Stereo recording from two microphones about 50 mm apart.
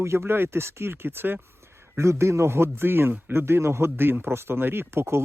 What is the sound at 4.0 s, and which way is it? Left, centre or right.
Speech, right.